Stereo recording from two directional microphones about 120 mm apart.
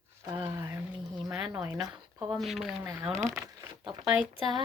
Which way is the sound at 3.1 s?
20° right (ahead or behind).